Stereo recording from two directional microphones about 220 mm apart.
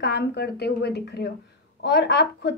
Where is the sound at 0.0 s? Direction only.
50° left (ahead or behind).